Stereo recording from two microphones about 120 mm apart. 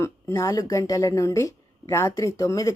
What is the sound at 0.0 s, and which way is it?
A woman's voice, 25° left (ahead or behind).